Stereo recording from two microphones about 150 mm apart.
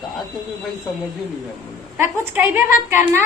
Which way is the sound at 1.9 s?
15° right (ahead or behind).